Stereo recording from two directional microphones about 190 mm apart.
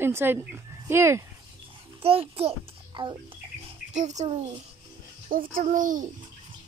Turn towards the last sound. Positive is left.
turn(degrees=-45)  # may be behind; listen again after turning